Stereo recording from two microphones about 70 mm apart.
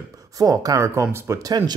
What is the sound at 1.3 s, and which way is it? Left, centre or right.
Speech, right.